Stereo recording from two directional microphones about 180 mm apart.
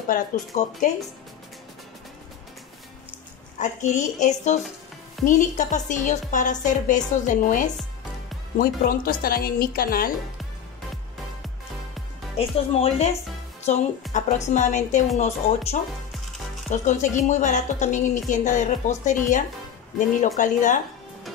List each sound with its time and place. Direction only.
0.1 s a woman's voice: 45° left (ahead or behind)
3.5 s a woman's voice: 40° left (ahead or behind)
12.4 s a woman's voice: 35° left (ahead or behind)
14.1 s a woman's voice: 45° left (ahead or behind)